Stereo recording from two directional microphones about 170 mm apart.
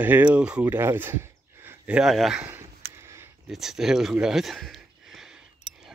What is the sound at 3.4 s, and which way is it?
Speech, centre (ahead or behind).